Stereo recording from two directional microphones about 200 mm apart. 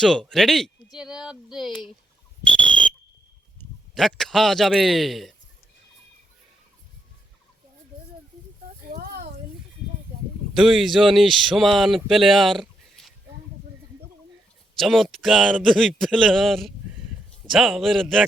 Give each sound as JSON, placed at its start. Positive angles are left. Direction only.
{"t": 0.0, "sound": "speech", "side_deg": 0}
{"t": 3.6, "sound": "a man's voice", "side_deg": 0}
{"t": 8.9, "sound": "a sound", "side_deg": -45}
{"t": 10.5, "sound": "speech", "side_deg": 0}
{"t": 14.8, "sound": "speech", "side_deg": 0}